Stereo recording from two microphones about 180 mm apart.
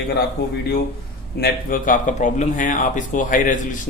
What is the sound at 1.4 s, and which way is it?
Speech, 50° left (ahead or behind).